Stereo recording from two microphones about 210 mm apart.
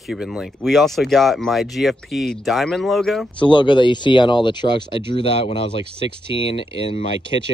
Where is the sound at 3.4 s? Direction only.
20° left (ahead or behind).